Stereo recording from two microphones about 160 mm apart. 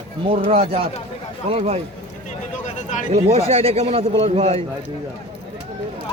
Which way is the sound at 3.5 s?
40° right (ahead or behind).